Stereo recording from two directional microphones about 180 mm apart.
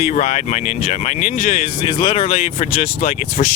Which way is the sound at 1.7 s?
25° left (ahead or behind).